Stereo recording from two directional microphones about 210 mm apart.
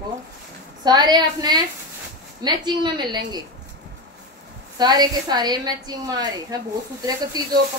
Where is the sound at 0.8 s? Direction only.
20° right (ahead or behind).